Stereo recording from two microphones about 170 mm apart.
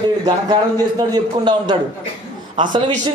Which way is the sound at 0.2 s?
25° right (ahead or behind).